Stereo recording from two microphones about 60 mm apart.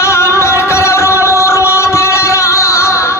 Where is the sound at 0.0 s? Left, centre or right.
Left.